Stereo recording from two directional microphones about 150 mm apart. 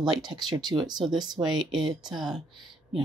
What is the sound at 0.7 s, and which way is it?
Speech, 30° right (ahead or behind).